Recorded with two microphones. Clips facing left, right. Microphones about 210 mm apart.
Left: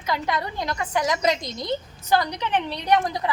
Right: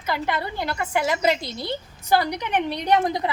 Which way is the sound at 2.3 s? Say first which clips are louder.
Right 1 dB; 15° right (ahead or behind).